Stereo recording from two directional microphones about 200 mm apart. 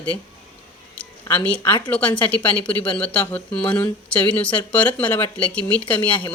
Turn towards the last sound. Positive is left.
turn(degrees=5)  # may be behind; listen again after turning